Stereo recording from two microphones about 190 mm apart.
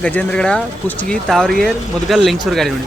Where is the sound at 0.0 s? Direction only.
5° left (ahead or behind).